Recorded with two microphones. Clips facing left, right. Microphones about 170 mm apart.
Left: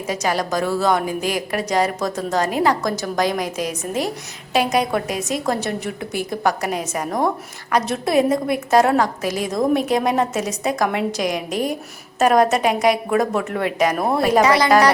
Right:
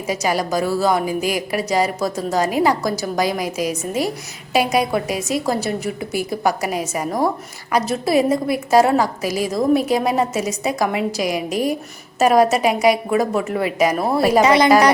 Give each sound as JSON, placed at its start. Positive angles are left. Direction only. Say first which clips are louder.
{"t": 0.1, "sound": "a woman's voice", "louder": "right 2 dB", "side_deg": -10}
{"t": 14.4, "sound": "a woman's voice", "louder": "right 2 dB", "side_deg": -20}